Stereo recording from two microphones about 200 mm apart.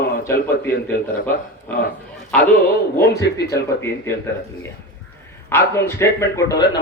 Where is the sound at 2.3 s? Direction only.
5° left (ahead or behind).